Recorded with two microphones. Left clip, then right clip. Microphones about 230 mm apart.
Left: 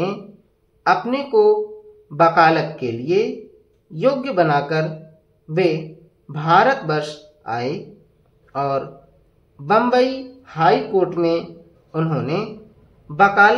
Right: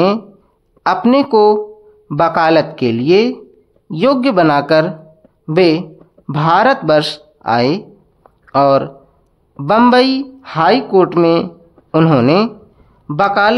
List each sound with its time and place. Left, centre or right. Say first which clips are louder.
0.8 s speech: right 6 dB; right
6.2 s a man's voice: right 4 dB; right